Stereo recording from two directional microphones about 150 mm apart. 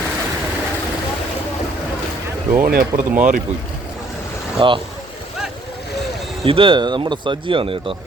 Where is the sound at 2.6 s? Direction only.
70° right (ahead or behind).